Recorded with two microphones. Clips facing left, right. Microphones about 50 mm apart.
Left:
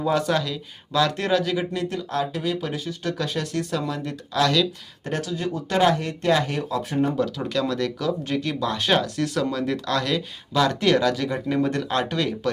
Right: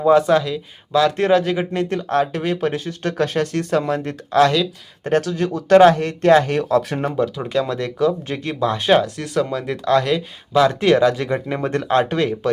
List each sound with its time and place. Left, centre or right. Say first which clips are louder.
0.0 s speech: right 8 dB; right
1.1 s speech: right 6 dB; right
5.0 s speech: right 8 dB; right
7.2 s speech: right 4 dB; right
8.9 s speech: right 6 dB; centre
11.2 s speech: right 2 dB; right